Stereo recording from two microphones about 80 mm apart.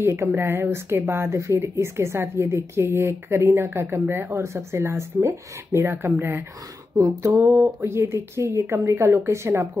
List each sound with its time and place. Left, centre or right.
0.0 s a woman's voice: right
7.0 s a sound: right
7.3 s a woman's voice: right